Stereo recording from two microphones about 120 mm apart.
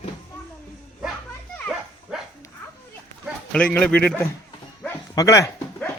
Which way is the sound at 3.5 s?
10° left (ahead or behind).